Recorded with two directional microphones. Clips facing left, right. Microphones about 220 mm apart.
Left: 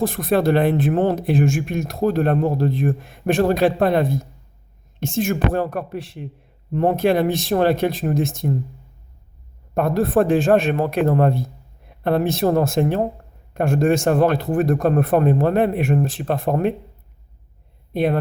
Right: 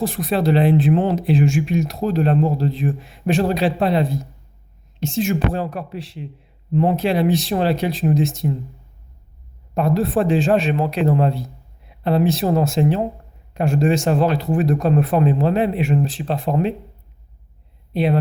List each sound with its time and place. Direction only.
0.0 s speech: 50° left (ahead or behind)
9.7 s speech: 50° left (ahead or behind)
17.9 s speech: 50° left (ahead or behind)